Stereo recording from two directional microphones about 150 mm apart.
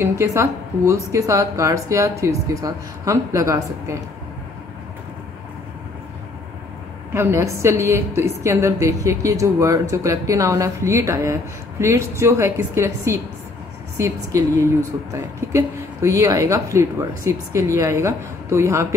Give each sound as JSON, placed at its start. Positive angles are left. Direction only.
{"t": 0.0, "sound": "a woman's voice", "side_deg": -20}
{"t": 7.2, "sound": "a woman's voice", "side_deg": -15}